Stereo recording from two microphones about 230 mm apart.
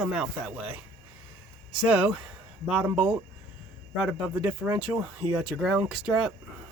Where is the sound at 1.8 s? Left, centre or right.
Centre.